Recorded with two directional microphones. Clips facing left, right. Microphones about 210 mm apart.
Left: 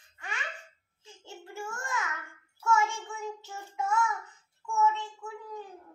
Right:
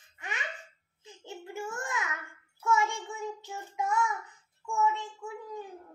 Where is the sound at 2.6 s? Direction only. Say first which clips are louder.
Left 1 dB; 15° right (ahead or behind).